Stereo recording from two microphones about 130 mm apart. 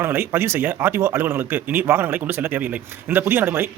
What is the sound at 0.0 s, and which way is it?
Speech, 15° right (ahead or behind).